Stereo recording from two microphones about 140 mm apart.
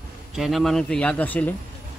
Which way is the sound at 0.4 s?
Centre (ahead or behind).